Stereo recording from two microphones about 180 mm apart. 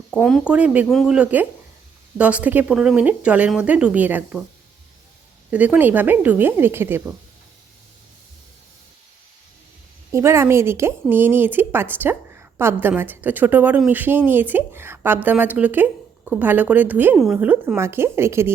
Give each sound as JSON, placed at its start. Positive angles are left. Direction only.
{"t": 0.1, "sound": "speech", "side_deg": 0}
{"t": 5.5, "sound": "speech", "side_deg": -10}
{"t": 10.1, "sound": "speech", "side_deg": -15}